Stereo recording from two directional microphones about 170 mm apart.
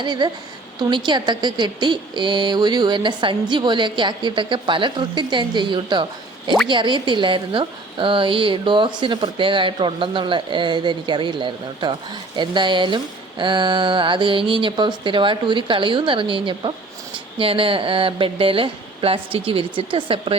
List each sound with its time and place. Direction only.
0.0 s a woman's voice: 25° right (ahead or behind)